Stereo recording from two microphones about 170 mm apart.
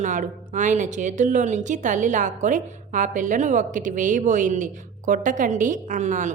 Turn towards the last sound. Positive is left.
turn(degrees=-45)  # may be behind; listen again after turning